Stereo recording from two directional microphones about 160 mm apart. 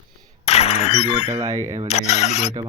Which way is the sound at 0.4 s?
40° left (ahead or behind).